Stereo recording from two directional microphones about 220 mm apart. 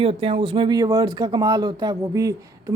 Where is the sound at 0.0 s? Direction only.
25° right (ahead or behind).